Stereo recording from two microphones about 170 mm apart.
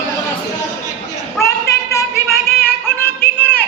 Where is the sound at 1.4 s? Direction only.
15° left (ahead or behind).